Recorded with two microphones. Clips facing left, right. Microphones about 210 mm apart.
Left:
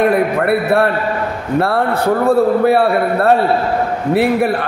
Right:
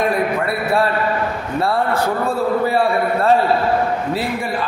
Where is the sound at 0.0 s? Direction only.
60° left (ahead or behind).